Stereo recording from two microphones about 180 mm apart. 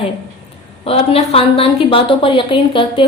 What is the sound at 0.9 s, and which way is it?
A woman's voice, 35° left (ahead or behind).